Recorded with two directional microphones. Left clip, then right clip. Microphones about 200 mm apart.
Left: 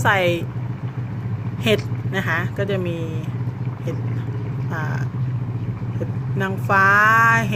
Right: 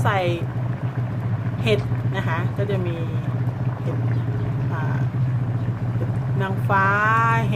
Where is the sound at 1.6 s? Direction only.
25° left (ahead or behind).